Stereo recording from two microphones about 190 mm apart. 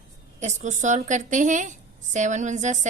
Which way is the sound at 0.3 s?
40° right (ahead or behind).